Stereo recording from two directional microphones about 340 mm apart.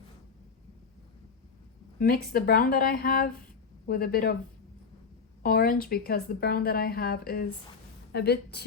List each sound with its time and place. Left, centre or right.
2.0 s speech: left
5.4 s speech: left